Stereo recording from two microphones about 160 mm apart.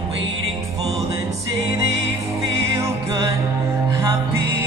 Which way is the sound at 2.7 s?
20° right (ahead or behind).